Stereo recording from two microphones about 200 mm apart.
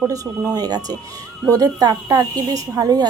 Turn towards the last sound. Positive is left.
turn(degrees=-20)  # may be behind; listen again after turning